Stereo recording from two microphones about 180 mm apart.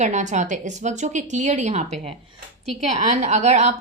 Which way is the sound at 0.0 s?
40° right (ahead or behind).